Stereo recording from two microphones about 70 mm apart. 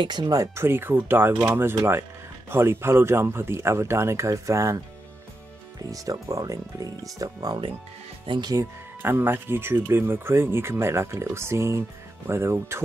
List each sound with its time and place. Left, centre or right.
0.0 s speech: right
0.6 s speech: right
9.0 s speech: right